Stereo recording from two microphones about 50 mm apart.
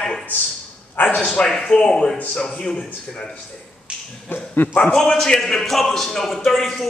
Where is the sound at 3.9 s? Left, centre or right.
Centre.